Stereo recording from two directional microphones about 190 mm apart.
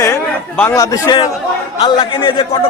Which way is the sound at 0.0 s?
10° left (ahead or behind).